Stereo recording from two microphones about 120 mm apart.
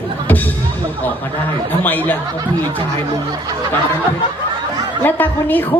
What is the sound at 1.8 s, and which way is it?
Speech, 15° left (ahead or behind).